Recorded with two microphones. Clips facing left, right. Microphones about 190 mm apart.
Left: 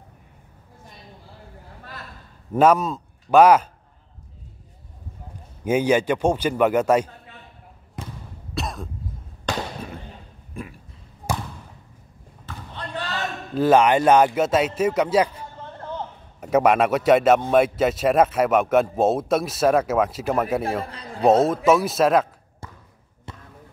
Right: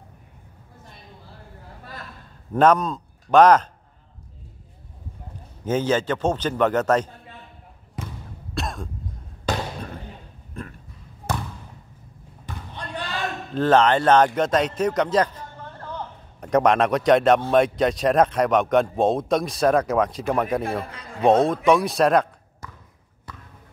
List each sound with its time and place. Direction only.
2.5 s a man's voice: 5° left (ahead or behind)
5.6 s a man's voice: 10° left (ahead or behind)
8.5 s cough: centre (ahead or behind)
10.5 s a sound: 10° left (ahead or behind)
12.4 s basketball bounce: 15° right (ahead or behind)
13.6 s a man's voice: 10° left (ahead or behind)
20.9 s a man's voice: 35° left (ahead or behind)
21.3 s speech: 5° left (ahead or behind)
22.6 s a sound: 30° left (ahead or behind)